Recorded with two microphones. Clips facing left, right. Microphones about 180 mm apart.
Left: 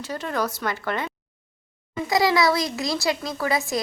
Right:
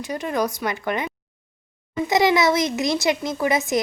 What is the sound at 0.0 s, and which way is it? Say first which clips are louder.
A child's voice: right 3 dB; 15° right (ahead or behind).